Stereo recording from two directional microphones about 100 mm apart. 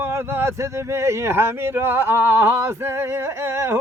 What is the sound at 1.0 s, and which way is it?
Speech, 25° right (ahead or behind).